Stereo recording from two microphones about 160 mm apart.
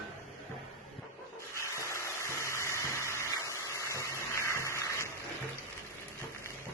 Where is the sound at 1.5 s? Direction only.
15° left (ahead or behind).